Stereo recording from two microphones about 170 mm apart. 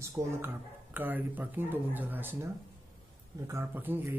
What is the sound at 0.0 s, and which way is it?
Speech, 15° right (ahead or behind).